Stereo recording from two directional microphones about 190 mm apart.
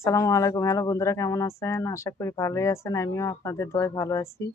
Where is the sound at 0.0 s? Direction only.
15° left (ahead or behind).